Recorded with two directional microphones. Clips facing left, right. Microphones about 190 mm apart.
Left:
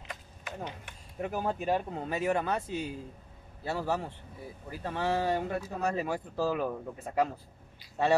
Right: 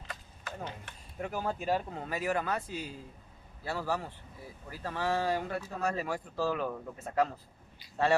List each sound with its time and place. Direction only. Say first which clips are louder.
0.1 s speech: left 1 dB; 15° left (ahead or behind)